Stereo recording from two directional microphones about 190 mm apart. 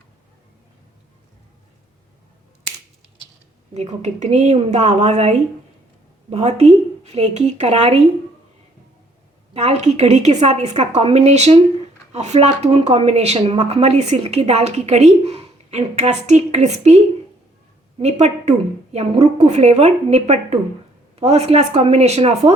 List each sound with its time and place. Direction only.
3.8 s speech: 35° right (ahead or behind)
9.5 s speech: 35° right (ahead or behind)
18.0 s speech: 35° right (ahead or behind)